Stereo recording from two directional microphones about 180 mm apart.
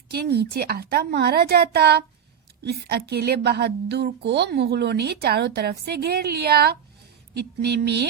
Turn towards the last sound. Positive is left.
turn(degrees=-65)  # may be behind; listen again after turning